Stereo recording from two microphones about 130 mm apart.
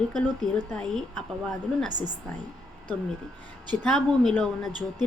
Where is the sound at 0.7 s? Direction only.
5° left (ahead or behind).